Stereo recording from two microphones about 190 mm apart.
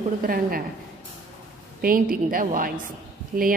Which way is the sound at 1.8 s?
50° right (ahead or behind).